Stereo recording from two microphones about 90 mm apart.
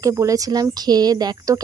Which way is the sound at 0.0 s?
35° right (ahead or behind).